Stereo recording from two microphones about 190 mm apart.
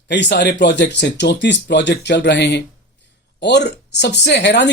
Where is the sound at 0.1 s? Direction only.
65° left (ahead or behind).